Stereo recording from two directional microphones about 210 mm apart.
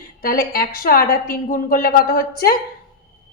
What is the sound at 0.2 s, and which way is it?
A woman's voice, 45° left (ahead or behind).